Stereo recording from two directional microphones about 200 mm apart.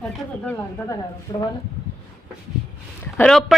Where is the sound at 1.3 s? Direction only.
20° left (ahead or behind).